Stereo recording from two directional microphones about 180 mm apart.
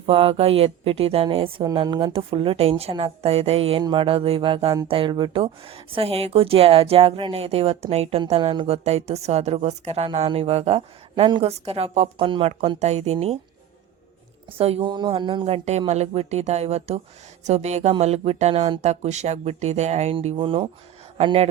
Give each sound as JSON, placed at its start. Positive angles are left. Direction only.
{"t": 0.0, "sound": "speech", "side_deg": -30}
{"t": 14.6, "sound": "speech", "side_deg": -30}